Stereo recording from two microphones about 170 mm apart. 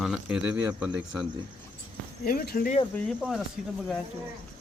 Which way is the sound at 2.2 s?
55° left (ahead or behind).